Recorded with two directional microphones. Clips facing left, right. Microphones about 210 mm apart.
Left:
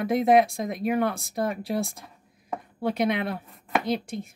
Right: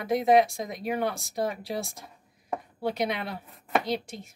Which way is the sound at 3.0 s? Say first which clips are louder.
Left 5 dB; 55° left (ahead or behind).